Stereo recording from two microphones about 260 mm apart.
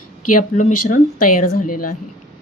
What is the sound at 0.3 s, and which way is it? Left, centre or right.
A woman's voice, left.